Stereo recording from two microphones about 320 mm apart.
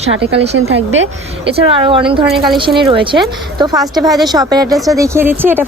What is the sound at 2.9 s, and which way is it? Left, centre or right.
A woman's voice, centre.